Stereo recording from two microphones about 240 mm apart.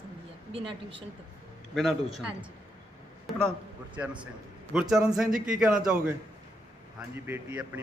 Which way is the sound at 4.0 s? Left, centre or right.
Centre.